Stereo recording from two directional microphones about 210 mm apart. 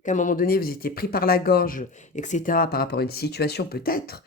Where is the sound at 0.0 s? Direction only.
35° left (ahead or behind).